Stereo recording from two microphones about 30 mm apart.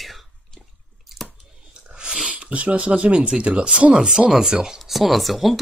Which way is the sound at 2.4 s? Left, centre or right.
Right.